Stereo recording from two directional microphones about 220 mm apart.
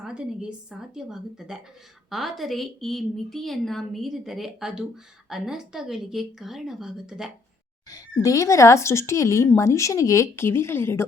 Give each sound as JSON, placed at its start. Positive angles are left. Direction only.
{"t": 0.0, "sound": "a woman's voice", "side_deg": -5}
{"t": 7.9, "sound": "speech", "side_deg": 15}